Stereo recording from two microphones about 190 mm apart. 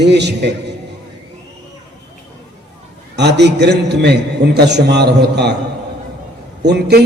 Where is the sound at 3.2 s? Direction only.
65° right (ahead or behind).